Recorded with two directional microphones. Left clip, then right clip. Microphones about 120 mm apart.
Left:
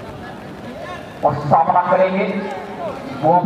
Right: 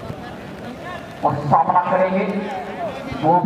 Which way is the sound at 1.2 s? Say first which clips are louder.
Left 3 dB; 20° left (ahead or behind).